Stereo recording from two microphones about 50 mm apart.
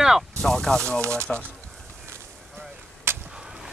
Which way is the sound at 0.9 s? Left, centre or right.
Right.